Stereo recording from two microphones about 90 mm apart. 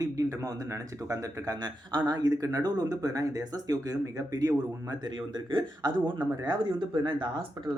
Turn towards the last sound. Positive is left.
turn(degrees=-65)  # may be behind; listen again after turning